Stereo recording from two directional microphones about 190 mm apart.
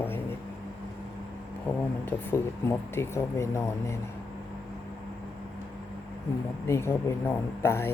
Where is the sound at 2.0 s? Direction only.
15° left (ahead or behind).